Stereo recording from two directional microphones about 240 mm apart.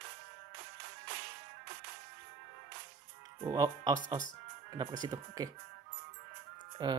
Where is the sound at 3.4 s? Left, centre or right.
Centre.